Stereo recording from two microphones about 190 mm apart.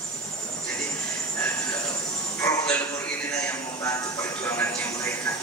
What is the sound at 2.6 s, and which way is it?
Music, 10° left (ahead or behind).